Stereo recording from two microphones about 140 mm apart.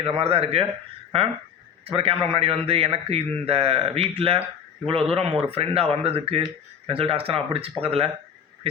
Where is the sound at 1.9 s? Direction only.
40° right (ahead or behind).